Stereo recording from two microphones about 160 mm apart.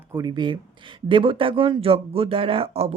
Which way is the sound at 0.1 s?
25° right (ahead or behind).